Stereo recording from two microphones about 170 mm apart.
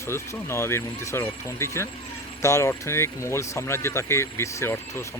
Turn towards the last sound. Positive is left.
turn(degrees=15)  # may be behind; listen again after turning